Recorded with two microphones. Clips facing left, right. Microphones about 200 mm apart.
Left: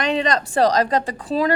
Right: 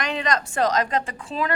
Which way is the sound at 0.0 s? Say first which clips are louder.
Left 5 dB; 30° left (ahead or behind).